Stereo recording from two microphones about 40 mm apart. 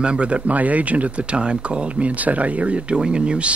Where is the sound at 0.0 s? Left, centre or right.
Right.